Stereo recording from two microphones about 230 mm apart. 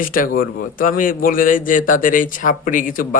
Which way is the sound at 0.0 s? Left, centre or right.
Left.